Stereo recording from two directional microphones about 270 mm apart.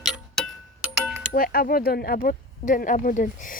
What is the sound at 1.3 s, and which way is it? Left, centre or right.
Speech, left.